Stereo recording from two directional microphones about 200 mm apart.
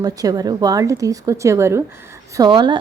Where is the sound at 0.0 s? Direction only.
20° right (ahead or behind).